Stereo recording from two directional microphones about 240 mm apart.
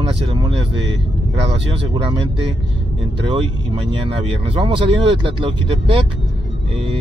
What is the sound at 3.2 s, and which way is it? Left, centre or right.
Speech, right.